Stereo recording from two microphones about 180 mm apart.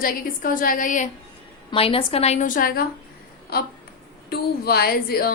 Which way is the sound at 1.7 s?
30° left (ahead or behind).